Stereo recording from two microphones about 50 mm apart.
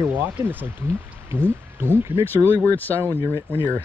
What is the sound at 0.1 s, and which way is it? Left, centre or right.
Speech, right.